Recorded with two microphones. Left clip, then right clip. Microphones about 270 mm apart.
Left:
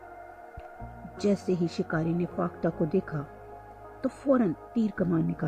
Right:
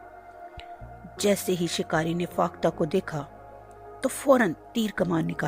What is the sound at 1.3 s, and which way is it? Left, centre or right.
A woman's voice, right.